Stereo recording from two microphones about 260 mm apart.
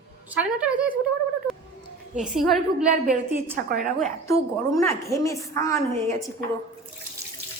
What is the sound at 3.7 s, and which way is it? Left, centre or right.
Speech, right.